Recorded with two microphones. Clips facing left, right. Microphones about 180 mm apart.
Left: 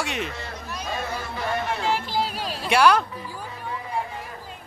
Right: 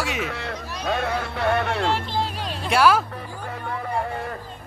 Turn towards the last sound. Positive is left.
turn(degrees=0)  # may be behind; listen again after turning